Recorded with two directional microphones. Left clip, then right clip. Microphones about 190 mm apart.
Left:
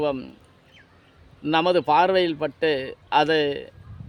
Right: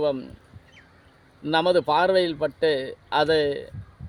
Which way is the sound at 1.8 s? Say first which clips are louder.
Left 1 dB; 60° left (ahead or behind).